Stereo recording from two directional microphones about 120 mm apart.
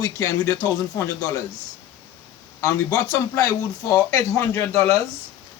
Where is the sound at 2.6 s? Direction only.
30° left (ahead or behind).